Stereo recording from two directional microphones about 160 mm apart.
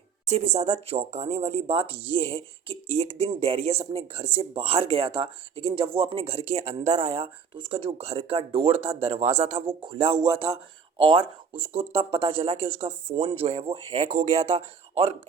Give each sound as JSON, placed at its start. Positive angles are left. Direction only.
{"t": 0.3, "sound": "speech", "side_deg": -45}
{"t": 9.8, "sound": "speech", "side_deg": -30}
{"t": 14.0, "sound": "speech", "side_deg": -45}